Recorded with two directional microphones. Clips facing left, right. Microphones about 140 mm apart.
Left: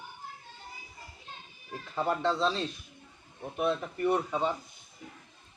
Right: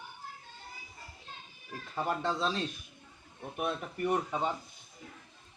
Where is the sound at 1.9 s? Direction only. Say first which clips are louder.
Left 4 dB; 10° right (ahead or behind).